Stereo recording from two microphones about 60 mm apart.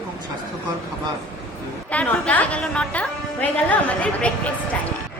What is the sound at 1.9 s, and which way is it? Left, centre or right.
A woman's voice, left.